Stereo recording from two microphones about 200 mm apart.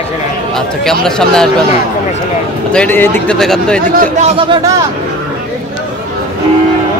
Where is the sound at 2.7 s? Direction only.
10° left (ahead or behind).